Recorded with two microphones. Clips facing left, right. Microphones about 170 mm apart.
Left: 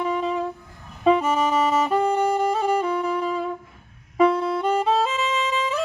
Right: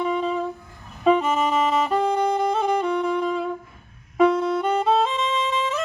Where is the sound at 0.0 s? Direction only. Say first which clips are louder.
Right 1 dB; 10° left (ahead or behind).